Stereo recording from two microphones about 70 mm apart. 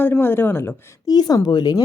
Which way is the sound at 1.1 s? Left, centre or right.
Left.